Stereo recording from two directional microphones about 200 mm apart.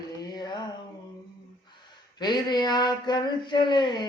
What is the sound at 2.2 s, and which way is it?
Speech, 20° left (ahead or behind).